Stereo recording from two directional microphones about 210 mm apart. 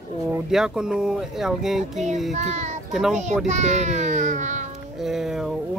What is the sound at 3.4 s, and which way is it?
A child's voice, 35° right (ahead or behind).